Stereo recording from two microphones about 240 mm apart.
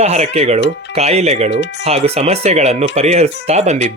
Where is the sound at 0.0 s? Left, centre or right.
Right.